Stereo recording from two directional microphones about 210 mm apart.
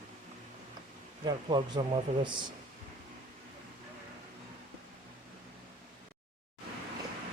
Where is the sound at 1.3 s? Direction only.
20° right (ahead or behind).